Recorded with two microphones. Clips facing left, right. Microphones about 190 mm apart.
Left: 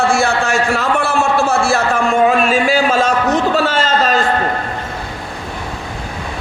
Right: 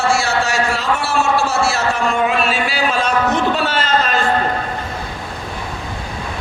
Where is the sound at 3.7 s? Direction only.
40° left (ahead or behind).